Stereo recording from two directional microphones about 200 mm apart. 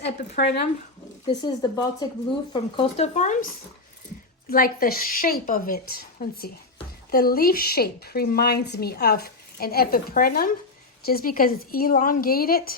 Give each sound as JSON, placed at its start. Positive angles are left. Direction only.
{"t": 0.4, "sound": "a woman's voice", "side_deg": 50}
{"t": 1.3, "sound": "speech", "side_deg": 20}
{"t": 4.4, "sound": "a woman's voice", "side_deg": 45}